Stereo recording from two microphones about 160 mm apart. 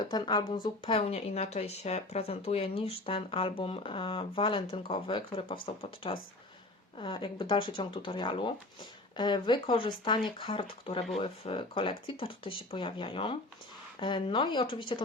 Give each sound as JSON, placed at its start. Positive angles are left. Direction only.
{"t": 0.0, "sound": "a woman's voice", "side_deg": 30}